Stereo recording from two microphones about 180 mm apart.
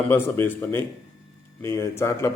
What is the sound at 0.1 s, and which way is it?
A man's voice, 15° left (ahead or behind).